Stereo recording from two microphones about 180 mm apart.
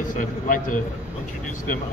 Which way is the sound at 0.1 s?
45° left (ahead or behind).